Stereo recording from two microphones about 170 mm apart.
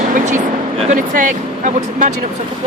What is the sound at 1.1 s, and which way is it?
Speech, 50° right (ahead or behind).